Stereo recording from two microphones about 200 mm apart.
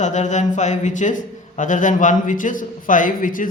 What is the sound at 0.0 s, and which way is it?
A man's voice, 35° left (ahead or behind).